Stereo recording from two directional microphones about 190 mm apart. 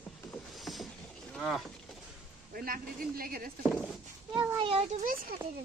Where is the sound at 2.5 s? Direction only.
50° right (ahead or behind).